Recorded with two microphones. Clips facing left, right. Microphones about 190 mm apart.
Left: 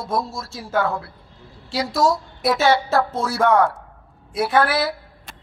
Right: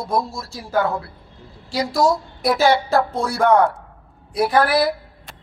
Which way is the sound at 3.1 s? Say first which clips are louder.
Right 1 dB; 5° left (ahead or behind).